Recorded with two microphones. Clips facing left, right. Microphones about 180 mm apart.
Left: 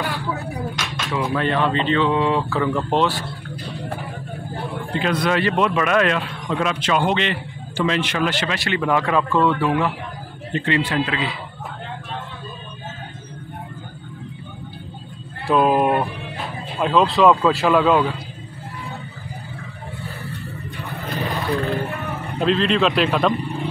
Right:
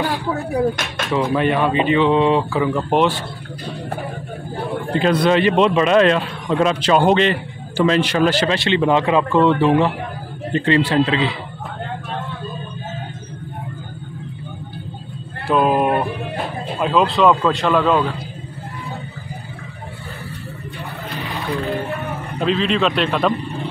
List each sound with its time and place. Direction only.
0.7 s speech: 55° right (ahead or behind)
1.1 s speech: 15° right (ahead or behind)
4.9 s a man's voice: 35° right (ahead or behind)
8.6 s speech: 25° right (ahead or behind)
10.5 s a man's voice: 35° right (ahead or behind)
15.4 s speech: centre (ahead or behind)
21.6 s roaring cats: centre (ahead or behind)